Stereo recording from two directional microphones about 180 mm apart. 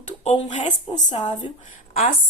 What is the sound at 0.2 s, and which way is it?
Speech, 40° left (ahead or behind).